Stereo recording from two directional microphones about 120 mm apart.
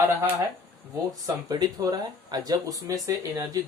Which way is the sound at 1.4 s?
30° right (ahead or behind).